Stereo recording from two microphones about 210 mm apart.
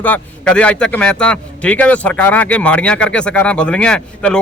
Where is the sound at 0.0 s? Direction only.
5° left (ahead or behind).